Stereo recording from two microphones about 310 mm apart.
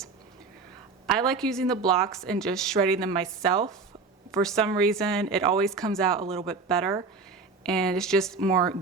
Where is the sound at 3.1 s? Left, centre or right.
Centre.